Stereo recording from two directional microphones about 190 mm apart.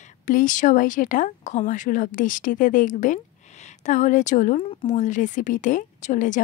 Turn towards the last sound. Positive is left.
turn(degrees=40)  # may be behind; listen again after turning